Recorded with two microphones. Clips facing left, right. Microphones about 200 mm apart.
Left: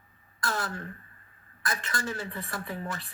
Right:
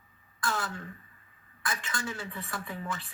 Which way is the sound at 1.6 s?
40° left (ahead or behind).